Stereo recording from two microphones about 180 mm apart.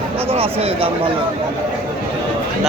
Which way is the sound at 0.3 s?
30° right (ahead or behind).